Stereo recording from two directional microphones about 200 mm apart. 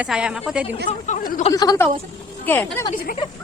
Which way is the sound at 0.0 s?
5° right (ahead or behind).